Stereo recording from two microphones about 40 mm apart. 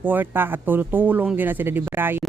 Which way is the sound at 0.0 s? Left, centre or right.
Right.